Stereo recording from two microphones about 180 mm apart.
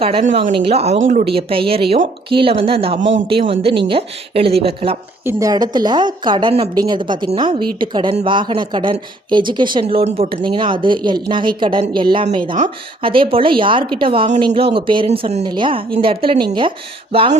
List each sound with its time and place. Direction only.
0.3 s speech: 45° right (ahead or behind)
0.5 s a woman's voice: 35° right (ahead or behind)
1.2 s a woman's voice: 30° right (ahead or behind)
5.2 s a woman's voice: 20° right (ahead or behind); by 15.4 s 35° right (ahead or behind)
15.4 s a woman's voice: 25° right (ahead or behind)